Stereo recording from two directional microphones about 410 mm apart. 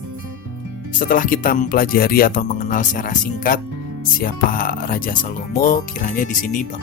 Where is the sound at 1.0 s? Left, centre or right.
Centre.